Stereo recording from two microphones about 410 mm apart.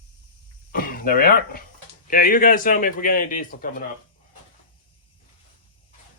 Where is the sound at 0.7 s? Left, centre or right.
Left.